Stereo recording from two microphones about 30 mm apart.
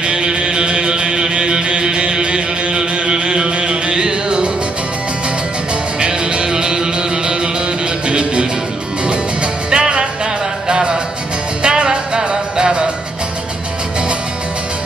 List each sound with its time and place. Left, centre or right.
0.0 s music: right
5.9 s music: right
8.1 s music: right
9.7 s music: right